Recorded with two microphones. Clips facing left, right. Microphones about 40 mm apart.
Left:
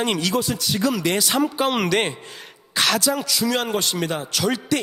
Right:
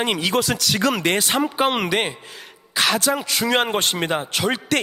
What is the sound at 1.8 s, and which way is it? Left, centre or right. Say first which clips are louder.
Speech: left 1 dB; centre.